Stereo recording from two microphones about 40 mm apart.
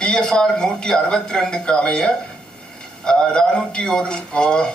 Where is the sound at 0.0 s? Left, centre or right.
Centre.